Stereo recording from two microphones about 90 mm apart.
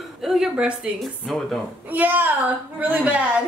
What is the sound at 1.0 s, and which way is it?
Speech, centre (ahead or behind).